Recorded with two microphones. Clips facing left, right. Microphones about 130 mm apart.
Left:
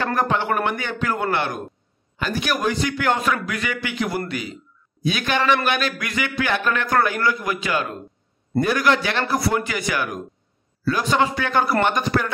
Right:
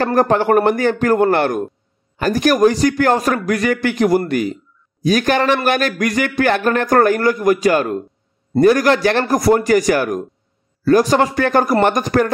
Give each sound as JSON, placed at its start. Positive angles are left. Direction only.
{"t": 0.0, "sound": "a man's voice", "side_deg": -45}